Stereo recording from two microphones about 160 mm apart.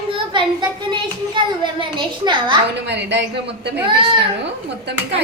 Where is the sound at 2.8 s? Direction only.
90° right.